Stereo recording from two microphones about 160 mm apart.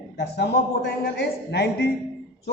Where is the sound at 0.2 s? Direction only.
90° left.